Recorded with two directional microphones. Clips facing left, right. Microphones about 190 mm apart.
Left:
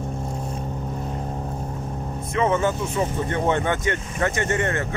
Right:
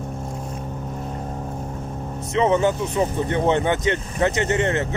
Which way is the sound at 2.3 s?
20° right (ahead or behind).